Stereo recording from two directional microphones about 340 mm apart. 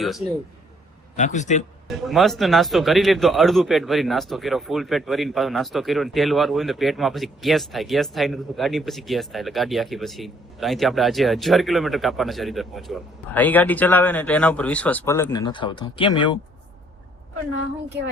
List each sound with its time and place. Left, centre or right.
1.1 s a man's voice: left
1.9 s speech: centre